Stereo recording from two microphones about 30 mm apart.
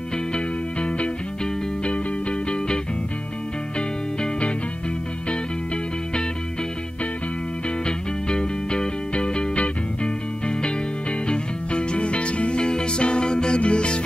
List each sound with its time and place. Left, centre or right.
0.3 s music: left
4.2 s music: left
7.6 s music: left